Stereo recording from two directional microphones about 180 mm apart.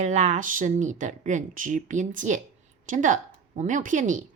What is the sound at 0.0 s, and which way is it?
A woman's voice, 40° right (ahead or behind).